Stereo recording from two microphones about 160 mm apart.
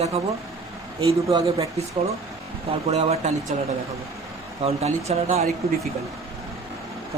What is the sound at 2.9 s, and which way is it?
Speech, 40° right (ahead or behind).